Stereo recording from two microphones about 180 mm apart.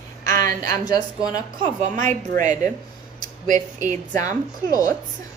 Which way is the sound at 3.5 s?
45° right (ahead or behind).